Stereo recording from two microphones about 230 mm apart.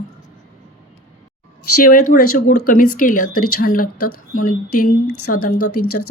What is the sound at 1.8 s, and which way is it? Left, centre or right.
Speech, left.